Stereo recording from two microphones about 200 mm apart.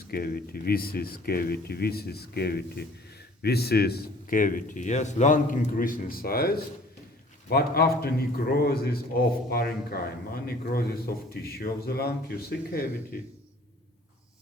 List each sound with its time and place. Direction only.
0.1 s a man's voice: 50° left (ahead or behind)